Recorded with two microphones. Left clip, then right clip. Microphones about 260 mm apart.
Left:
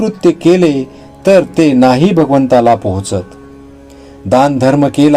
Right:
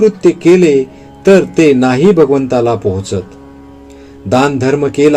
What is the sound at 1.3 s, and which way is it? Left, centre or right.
A man's voice, left.